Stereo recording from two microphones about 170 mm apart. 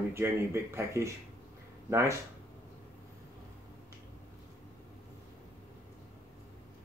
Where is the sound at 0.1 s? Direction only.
15° right (ahead or behind).